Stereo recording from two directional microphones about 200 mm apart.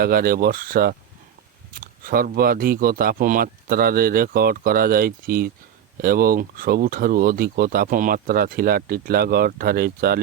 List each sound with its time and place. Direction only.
0.0 s speech: 45° right (ahead or behind)